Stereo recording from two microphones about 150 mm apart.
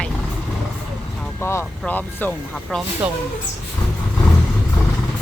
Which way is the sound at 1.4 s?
15° left (ahead or behind).